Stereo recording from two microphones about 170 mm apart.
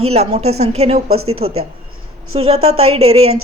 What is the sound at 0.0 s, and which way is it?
Speech, 40° right (ahead or behind).